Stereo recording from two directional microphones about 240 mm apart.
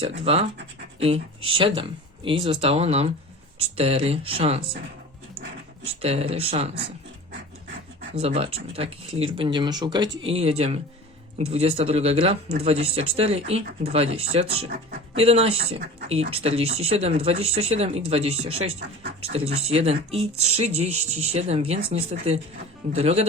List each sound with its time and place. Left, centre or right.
0.9 s speech: right
5.8 s speech: right
8.1 s speech: right